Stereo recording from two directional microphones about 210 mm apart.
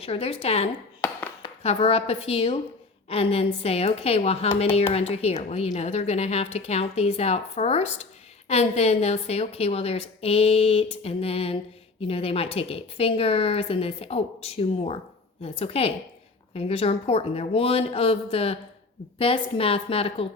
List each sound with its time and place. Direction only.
0.0 s a woman's voice: 25° left (ahead or behind)